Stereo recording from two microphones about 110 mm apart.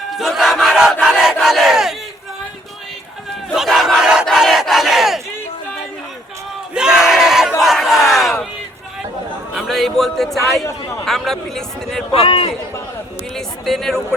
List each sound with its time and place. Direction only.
0.1 s battle cry: centre (ahead or behind)
3.5 s battle cry: 5° right (ahead or behind)
6.7 s battle cry: 5° right (ahead or behind)
8.1 s crowd: centre (ahead or behind)
9.6 s a sound: centre (ahead or behind)
11.0 s speech: 5° left (ahead or behind)
12.1 s a man's voice: 60° left (ahead or behind)
13.3 s speech: 5° left (ahead or behind)